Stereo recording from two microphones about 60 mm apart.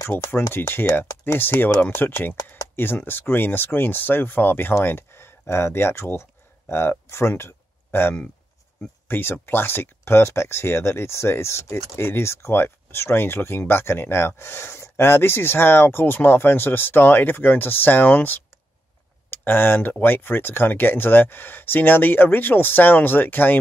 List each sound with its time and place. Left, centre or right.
0.1 s speech: left